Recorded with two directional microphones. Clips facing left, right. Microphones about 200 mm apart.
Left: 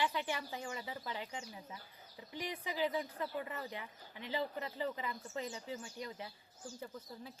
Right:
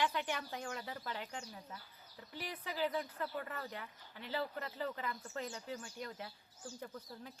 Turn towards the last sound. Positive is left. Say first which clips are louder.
# left 1 dB
turn(degrees=5)  # may be behind; listen again after turning